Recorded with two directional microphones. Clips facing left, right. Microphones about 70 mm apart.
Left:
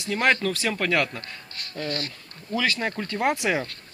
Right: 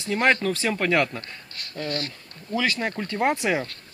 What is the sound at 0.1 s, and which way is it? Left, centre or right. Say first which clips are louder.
Speech: right 1 dB; centre.